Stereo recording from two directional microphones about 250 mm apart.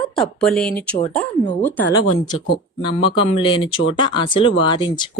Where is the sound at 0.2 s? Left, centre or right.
Centre.